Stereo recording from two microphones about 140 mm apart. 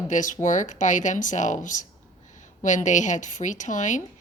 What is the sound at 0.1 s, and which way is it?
Speech, 65° left (ahead or behind).